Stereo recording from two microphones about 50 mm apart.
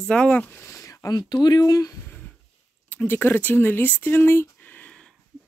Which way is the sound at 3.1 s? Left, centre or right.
Left.